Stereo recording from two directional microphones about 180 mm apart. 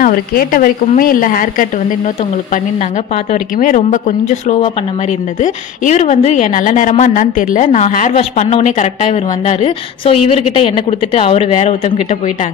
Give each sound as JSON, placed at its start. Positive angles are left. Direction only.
{"t": 0.0, "sound": "a woman's voice", "side_deg": 55}
{"t": 3.3, "sound": "a woman's voice", "side_deg": 45}